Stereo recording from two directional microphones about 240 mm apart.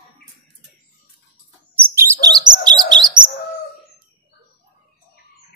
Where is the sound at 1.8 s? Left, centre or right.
Centre.